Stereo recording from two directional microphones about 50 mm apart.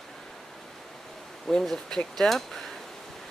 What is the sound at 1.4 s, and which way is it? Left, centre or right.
Speech, centre.